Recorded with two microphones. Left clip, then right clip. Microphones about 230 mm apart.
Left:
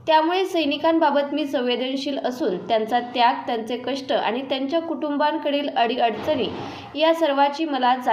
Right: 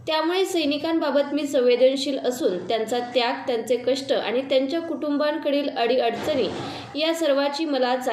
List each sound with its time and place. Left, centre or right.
0.1 s a woman's voice: left